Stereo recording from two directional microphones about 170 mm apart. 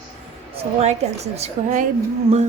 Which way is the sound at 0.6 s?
40° right (ahead or behind).